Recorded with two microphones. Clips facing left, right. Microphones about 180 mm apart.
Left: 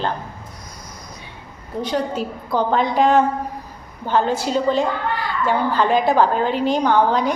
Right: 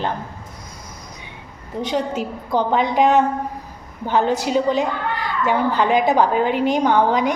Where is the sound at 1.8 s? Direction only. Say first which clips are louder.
Even; 20° right (ahead or behind).